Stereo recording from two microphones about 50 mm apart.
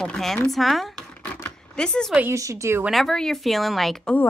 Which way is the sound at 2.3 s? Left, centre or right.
Right.